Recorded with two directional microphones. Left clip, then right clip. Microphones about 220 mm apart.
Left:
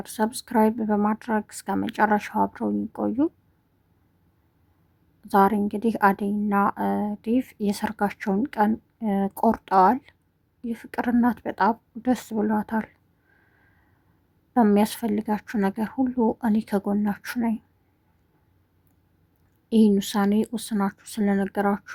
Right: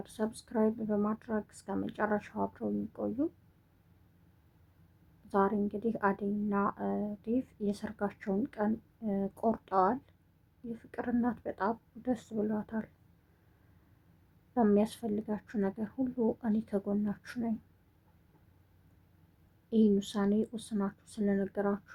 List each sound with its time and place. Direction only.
0.0 s speech: 35° left (ahead or behind)
5.3 s speech: 35° left (ahead or behind)
14.5 s speech: 35° left (ahead or behind)
19.7 s speech: 35° left (ahead or behind)